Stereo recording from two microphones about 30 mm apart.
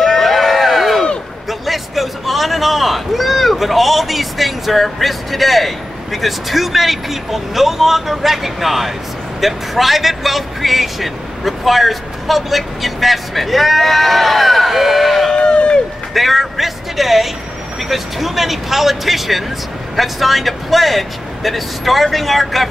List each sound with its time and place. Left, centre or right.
0.0 s a sound: centre
1.5 s speech: centre
15.3 s run: left
16.1 s speech: centre